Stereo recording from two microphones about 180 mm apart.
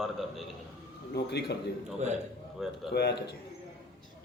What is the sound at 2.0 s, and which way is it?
Speech, 40° right (ahead or behind).